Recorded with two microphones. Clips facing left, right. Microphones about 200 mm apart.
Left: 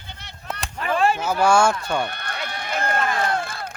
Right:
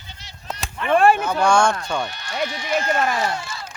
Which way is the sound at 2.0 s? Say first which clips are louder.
Right 5 dB; 55° left (ahead or behind).